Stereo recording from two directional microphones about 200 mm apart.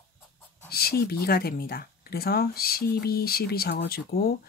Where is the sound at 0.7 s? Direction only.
50° left (ahead or behind).